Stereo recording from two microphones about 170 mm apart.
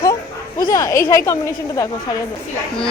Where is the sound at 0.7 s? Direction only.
20° left (ahead or behind).